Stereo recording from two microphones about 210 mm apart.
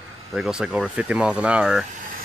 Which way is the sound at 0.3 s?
Centre (ahead or behind).